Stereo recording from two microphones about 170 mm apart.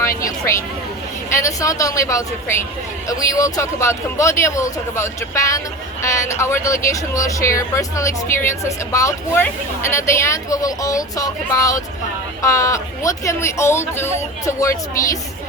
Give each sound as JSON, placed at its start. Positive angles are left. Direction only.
{"t": 0.2, "sound": "a man's voice", "side_deg": 15}